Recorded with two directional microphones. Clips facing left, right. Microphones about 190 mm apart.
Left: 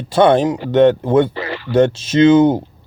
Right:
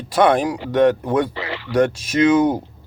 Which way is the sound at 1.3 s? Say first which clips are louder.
Left 4 dB; 45° left (ahead or behind).